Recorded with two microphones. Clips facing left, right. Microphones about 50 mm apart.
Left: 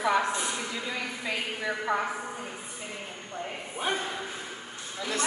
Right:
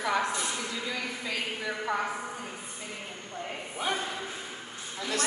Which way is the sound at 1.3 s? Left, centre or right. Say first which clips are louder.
Left 2 dB; centre.